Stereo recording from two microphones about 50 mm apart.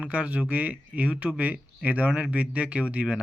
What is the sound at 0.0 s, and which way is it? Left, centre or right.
Speech, right.